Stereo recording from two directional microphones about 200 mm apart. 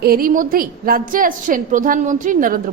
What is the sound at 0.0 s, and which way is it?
A woman's voice, 45° right (ahead or behind).